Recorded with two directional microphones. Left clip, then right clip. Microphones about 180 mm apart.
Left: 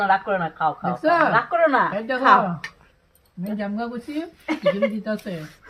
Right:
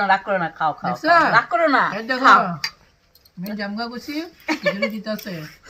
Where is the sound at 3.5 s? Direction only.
5° right (ahead or behind).